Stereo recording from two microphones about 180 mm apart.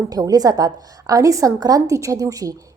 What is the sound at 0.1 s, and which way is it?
A woman's voice, 20° right (ahead or behind).